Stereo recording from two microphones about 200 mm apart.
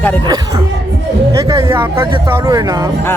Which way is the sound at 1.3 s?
15° right (ahead or behind).